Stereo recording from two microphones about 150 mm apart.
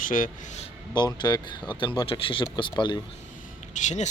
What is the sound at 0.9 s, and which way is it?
Speech, 30° left (ahead or behind).